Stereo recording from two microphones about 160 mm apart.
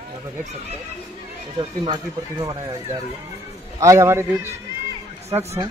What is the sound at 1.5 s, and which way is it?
Speech, 30° right (ahead or behind).